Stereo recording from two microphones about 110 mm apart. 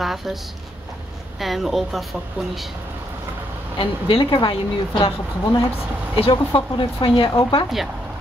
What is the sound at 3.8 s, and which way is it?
Speech, 50° left (ahead or behind).